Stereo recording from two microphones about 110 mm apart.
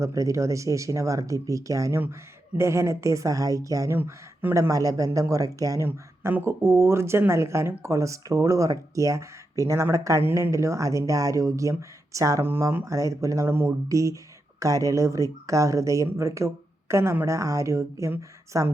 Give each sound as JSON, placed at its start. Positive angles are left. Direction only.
{"t": 0.0, "sound": "speech", "side_deg": -30}
{"t": 3.9, "sound": "speech", "side_deg": -20}
{"t": 5.9, "sound": "speech", "side_deg": -20}